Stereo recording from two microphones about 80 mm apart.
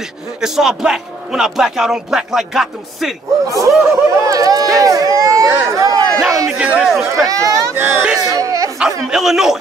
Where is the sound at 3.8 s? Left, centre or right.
Right.